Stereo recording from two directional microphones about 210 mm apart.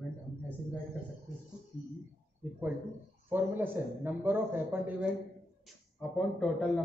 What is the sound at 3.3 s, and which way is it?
A man's voice, 10° right (ahead or behind).